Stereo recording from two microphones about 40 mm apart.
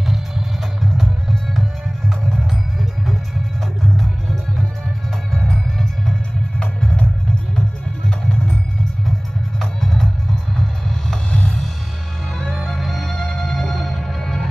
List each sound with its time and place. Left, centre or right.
1.6 s music: centre
5.3 s music: centre
6.6 s music: left
9.6 s music: centre